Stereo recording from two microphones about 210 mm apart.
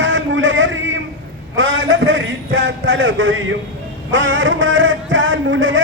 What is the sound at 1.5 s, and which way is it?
A man's voice, 65° right (ahead or behind).